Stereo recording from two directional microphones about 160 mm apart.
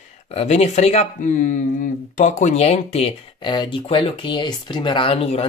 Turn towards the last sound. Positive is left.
turn(degrees=35)  # may be behind; listen again after turning